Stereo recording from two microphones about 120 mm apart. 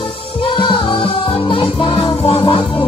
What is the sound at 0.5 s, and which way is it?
Music, 45° left (ahead or behind).